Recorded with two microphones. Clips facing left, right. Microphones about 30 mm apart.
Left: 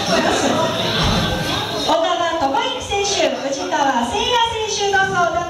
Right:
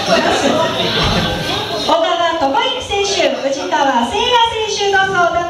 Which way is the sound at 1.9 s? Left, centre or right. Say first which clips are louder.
Right 4 dB; centre.